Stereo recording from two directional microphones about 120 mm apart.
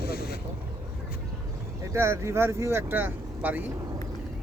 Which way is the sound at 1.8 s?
20° right (ahead or behind).